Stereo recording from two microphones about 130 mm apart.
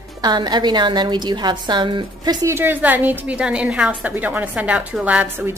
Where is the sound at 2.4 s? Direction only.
15° right (ahead or behind).